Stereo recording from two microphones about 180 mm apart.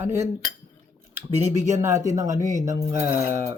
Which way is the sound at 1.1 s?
15° right (ahead or behind).